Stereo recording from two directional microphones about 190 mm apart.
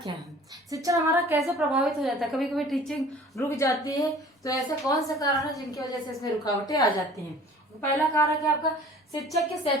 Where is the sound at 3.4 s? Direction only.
15° left (ahead or behind).